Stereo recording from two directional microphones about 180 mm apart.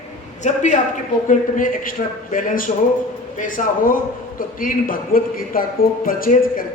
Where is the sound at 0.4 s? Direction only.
40° left (ahead or behind).